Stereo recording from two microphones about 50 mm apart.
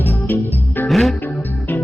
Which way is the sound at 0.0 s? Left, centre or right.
Left.